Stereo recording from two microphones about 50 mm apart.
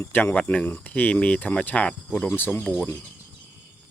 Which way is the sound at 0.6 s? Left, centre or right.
Left.